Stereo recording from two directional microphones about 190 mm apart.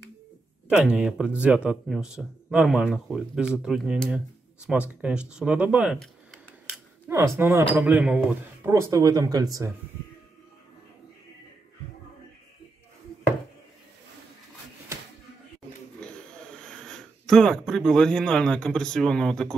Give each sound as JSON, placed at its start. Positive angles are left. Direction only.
{"t": 0.7, "sound": "speech", "side_deg": -5}
{"t": 8.9, "sound": "speech", "side_deg": -20}
{"t": 16.0, "sound": "speech", "side_deg": 5}